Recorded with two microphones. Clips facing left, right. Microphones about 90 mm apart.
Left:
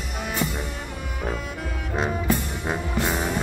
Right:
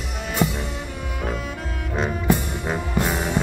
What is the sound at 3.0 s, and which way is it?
Music, centre (ahead or behind).